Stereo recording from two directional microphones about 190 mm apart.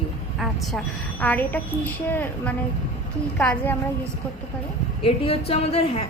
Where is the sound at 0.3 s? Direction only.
Centre (ahead or behind).